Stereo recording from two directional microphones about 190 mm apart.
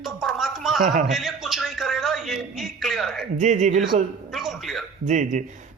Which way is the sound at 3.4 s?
40° right (ahead or behind).